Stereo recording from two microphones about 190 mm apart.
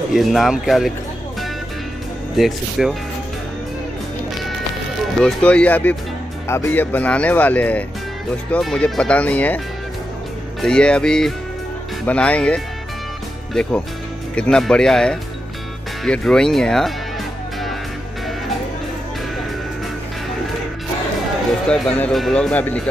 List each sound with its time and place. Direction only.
0.1 s speech: centre (ahead or behind)
2.3 s speech: centre (ahead or behind)
5.2 s speech: 5° left (ahead or behind)
10.6 s speech: 5° left (ahead or behind)
21.6 s speech: 5° left (ahead or behind)